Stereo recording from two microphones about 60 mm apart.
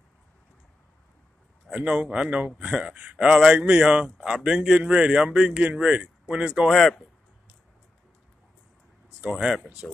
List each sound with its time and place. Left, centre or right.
1.7 s speech: centre
5.5 s speech: right
6.7 s speech: centre
9.3 s speech: centre